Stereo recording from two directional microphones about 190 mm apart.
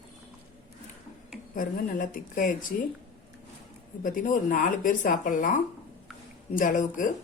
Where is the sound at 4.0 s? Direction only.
45° left (ahead or behind).